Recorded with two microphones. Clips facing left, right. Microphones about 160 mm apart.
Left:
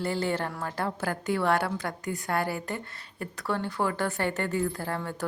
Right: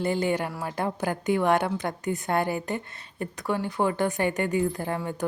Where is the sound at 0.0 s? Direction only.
20° right (ahead or behind).